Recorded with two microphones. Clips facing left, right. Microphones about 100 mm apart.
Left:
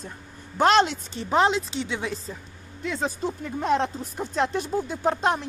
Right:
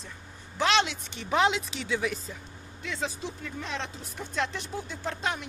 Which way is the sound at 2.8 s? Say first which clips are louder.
Left 6 dB; 45° left (ahead or behind).